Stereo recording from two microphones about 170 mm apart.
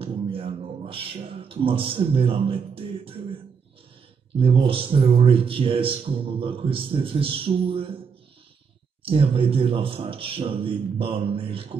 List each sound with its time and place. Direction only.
0.0 s a sound: 35° right (ahead or behind)
4.4 s speech: 30° right (ahead or behind)
9.0 s speech: 30° right (ahead or behind)